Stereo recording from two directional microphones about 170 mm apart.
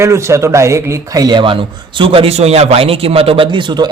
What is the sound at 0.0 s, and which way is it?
A man's voice, 15° right (ahead or behind).